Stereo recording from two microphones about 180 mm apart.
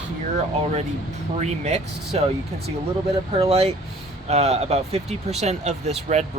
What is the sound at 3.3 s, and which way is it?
Speech, 35° right (ahead or behind).